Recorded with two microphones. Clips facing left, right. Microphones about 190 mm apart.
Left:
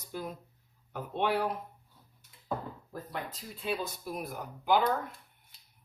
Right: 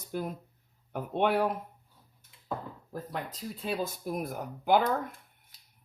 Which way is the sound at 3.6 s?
45° right (ahead or behind).